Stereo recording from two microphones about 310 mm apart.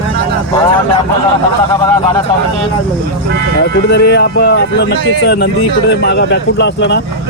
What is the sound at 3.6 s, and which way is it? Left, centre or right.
Speech, left.